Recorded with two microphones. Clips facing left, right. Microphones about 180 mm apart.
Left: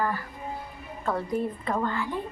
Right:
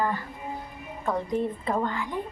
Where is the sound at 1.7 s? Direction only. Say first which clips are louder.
Left 1 dB; 15° right (ahead or behind).